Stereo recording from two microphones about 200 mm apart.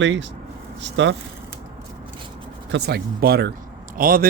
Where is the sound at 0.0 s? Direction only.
65° right (ahead or behind).